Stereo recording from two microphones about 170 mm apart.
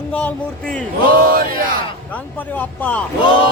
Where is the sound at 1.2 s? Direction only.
60° right (ahead or behind).